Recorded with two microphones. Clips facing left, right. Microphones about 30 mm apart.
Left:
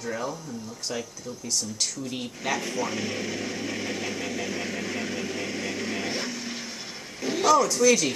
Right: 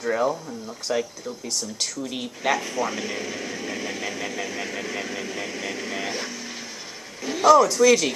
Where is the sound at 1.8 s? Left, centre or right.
Right.